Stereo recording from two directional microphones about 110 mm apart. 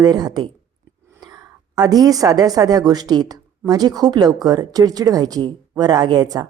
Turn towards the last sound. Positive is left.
turn(degrees=-35)  # may be behind; listen again after turning